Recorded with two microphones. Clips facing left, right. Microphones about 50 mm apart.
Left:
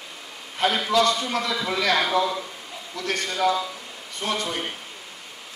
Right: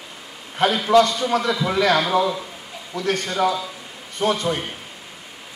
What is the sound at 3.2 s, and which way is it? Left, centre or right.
A man's voice, right.